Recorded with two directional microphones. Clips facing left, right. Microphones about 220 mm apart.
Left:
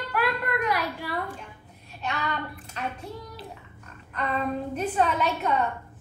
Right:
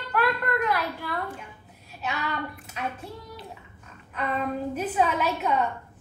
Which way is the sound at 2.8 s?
5° right (ahead or behind).